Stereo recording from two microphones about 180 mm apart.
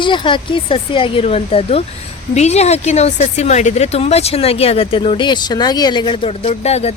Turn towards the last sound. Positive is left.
turn(degrees=35)  # may be behind; listen again after turning